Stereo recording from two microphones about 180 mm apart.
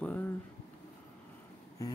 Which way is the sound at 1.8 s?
20° left (ahead or behind).